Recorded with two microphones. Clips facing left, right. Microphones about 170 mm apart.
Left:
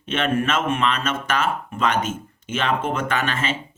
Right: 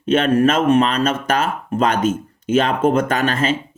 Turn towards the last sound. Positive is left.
turn(degrees=-40)  # may be behind; listen again after turning